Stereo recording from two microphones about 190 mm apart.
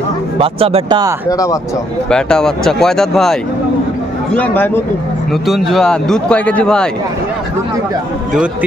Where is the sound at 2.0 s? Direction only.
5° left (ahead or behind).